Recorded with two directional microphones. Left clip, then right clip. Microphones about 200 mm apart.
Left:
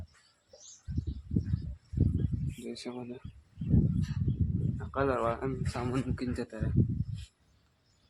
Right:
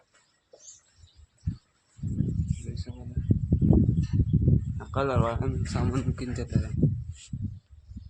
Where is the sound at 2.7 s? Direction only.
55° left (ahead or behind).